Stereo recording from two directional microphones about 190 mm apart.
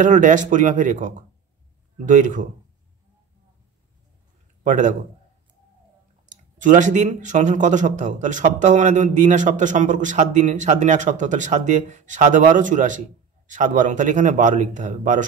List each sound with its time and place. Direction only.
0.0 s speech: 40° right (ahead or behind)
4.6 s speech: 40° right (ahead or behind)
6.2 s speech: 40° right (ahead or behind)